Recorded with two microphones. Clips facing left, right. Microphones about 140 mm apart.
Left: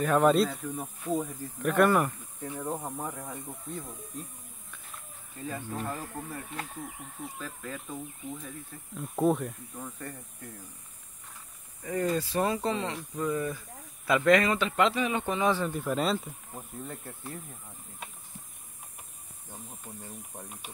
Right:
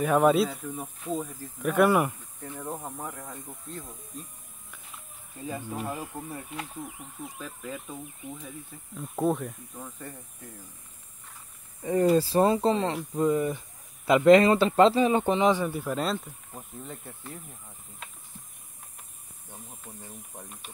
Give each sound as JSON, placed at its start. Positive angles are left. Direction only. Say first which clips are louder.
{"t": 0.0, "sound": "speech", "louder": "right 1 dB", "side_deg": -5}
{"t": 2.4, "sound": "speech", "louder": "left 2 dB", "side_deg": 10}
{"t": 5.6, "sound": "speech", "louder": "right 2 dB", "side_deg": -10}
{"t": 7.3, "sound": "speech", "louder": "right 3 dB", "side_deg": -10}
{"t": 11.8, "sound": "speech", "louder": "right 7 dB", "side_deg": -30}
{"t": 15.4, "sound": "speech", "louder": "right 4 dB", "side_deg": -15}
{"t": 15.8, "sound": "speech", "louder": "left 1 dB", "side_deg": 0}